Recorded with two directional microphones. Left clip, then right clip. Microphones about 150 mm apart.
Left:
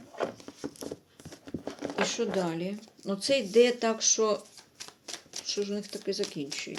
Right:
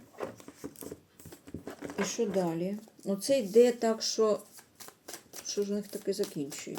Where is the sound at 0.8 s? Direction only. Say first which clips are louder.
Left 5 dB; 15° left (ahead or behind).